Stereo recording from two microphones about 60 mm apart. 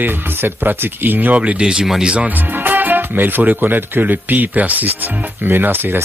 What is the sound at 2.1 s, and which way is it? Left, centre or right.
Speech, right.